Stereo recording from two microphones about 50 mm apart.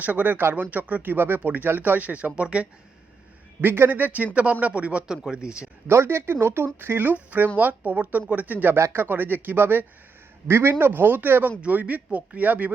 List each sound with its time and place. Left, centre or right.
0.0 s speech: right
3.6 s speech: right
4.6 s speech: right
5.9 s speech: right
8.7 s speech: right
10.4 s speech: right